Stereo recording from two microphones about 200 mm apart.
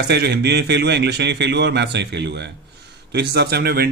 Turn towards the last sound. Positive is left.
turn(degrees=-50)  # may be behind; listen again after turning